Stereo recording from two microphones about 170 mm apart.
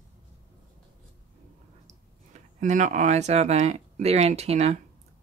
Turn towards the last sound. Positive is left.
turn(degrees=-40)  # may be behind; listen again after turning